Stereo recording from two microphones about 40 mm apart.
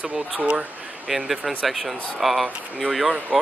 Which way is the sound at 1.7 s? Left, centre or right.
Centre.